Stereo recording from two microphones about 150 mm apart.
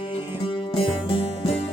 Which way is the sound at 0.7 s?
35° left (ahead or behind).